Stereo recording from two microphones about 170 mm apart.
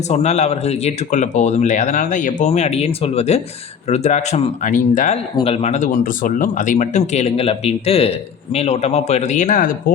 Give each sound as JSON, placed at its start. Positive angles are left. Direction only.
{"t": 0.1, "sound": "speech", "side_deg": 40}
{"t": 5.4, "sound": "speech", "side_deg": 35}